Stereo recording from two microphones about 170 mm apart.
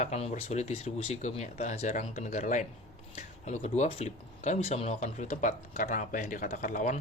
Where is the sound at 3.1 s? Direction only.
40° left (ahead or behind).